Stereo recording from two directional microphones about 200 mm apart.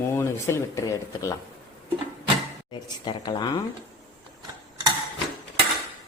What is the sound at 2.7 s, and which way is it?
Speech, 20° left (ahead or behind).